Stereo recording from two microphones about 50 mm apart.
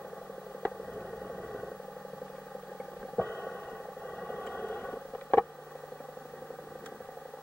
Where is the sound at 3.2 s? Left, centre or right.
Left.